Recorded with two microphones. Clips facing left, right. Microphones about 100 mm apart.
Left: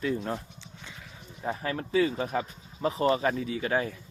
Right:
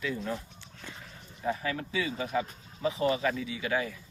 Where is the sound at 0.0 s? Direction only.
35° left (ahead or behind).